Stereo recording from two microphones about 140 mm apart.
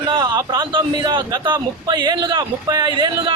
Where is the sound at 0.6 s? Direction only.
35° right (ahead or behind).